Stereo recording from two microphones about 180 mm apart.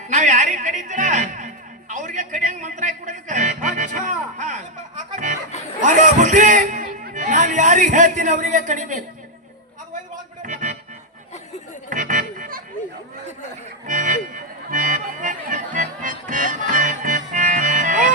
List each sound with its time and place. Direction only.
0.1 s speech: 40° right (ahead or behind)
1.9 s a sound: 45° right (ahead or behind)
5.1 s chatter: 45° right (ahead or behind)
5.8 s a man's voice: 45° right (ahead or behind)
10.4 s music: 45° right (ahead or behind)
11.9 s music: 45° right (ahead or behind)
13.8 s music: 45° right (ahead or behind)